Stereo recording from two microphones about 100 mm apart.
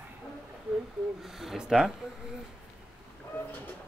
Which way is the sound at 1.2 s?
5° right (ahead or behind).